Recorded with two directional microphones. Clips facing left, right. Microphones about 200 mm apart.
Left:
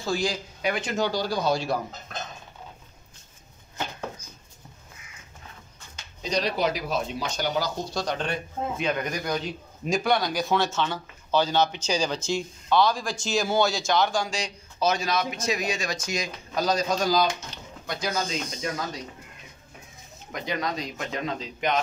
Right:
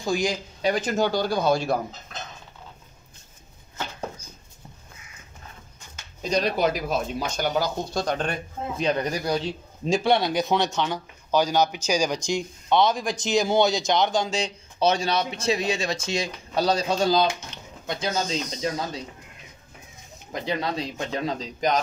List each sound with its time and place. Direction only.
0.0 s speech: 15° right (ahead or behind)
0.6 s speech: 35° right (ahead or behind); by 1.8 s 55° right (ahead or behind)
6.3 s speech: 50° right (ahead or behind); by 17.3 s 25° right (ahead or behind)
17.5 s a sound: 35° left (ahead or behind)
17.8 s speech: 25° right (ahead or behind)
20.3 s a man's voice: 30° right (ahead or behind)